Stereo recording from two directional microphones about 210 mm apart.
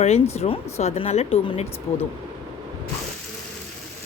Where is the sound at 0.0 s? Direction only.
30° left (ahead or behind).